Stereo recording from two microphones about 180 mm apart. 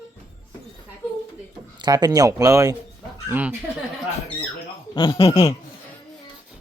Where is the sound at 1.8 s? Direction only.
25° right (ahead or behind).